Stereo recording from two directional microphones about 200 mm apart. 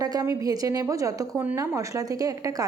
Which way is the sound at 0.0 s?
15° right (ahead or behind).